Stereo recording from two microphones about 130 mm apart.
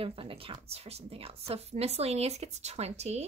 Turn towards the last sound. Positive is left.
turn(degrees=-55)  # may be behind; listen again after turning